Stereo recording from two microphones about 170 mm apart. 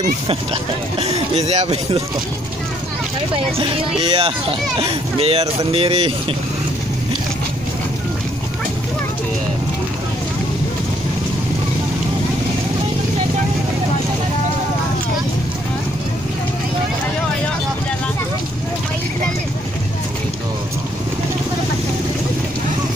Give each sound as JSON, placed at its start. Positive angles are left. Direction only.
{"t": 0.0, "sound": "speech", "side_deg": -35}
{"t": 3.5, "sound": "speech", "side_deg": -25}